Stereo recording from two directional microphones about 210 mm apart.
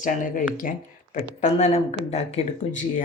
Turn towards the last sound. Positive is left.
turn(degrees=35)  # may be behind; listen again after turning